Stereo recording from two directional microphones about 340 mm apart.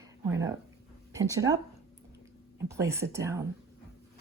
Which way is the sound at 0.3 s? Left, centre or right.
Centre.